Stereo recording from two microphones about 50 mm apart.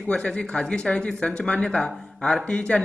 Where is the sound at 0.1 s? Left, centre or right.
Centre.